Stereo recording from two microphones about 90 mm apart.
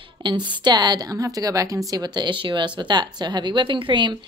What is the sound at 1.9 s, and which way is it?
Speech, 50° right (ahead or behind).